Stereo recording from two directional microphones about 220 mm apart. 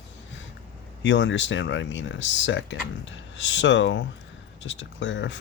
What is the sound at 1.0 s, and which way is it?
Speech, 55° left (ahead or behind).